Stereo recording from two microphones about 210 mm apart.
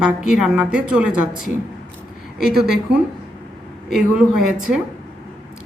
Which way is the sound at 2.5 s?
Centre (ahead or behind).